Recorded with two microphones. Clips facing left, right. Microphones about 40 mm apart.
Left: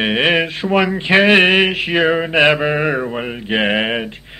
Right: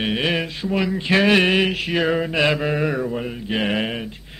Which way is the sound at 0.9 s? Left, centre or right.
Left.